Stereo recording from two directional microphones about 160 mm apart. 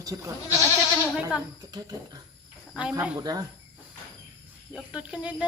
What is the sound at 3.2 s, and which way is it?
Speech, 25° right (ahead or behind).